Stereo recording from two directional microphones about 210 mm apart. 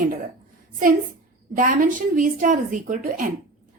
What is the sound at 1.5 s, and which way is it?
A woman's voice, 40° right (ahead or behind).